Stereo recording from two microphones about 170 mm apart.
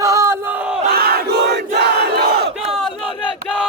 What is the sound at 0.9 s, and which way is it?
Crowd, 65° right (ahead or behind).